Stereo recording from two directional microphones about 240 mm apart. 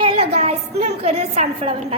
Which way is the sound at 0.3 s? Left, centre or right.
Right.